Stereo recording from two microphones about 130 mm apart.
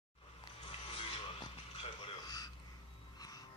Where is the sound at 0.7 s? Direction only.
50° left (ahead or behind).